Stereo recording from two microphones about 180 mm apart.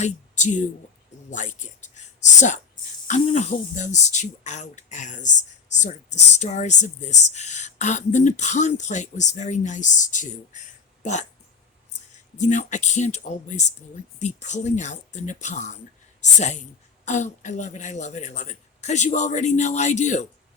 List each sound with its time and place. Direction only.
0.0 s speech: 40° left (ahead or behind)
3.1 s speech: 40° left (ahead or behind)
12.4 s speech: 40° left (ahead or behind)